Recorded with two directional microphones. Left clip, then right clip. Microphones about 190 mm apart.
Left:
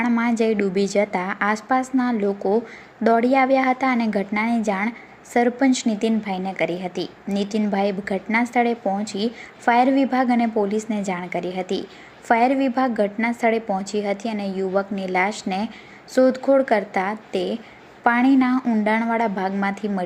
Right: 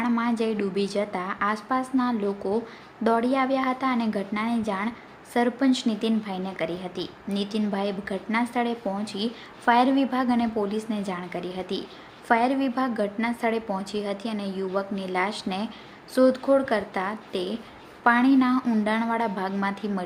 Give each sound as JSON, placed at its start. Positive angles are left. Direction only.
{"t": 0.0, "sound": "a woman's voice", "side_deg": 15}